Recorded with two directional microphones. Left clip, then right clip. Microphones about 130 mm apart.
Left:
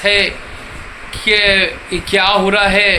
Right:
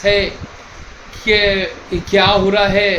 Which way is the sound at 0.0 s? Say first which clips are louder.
Left 2 dB; 15° right (ahead or behind).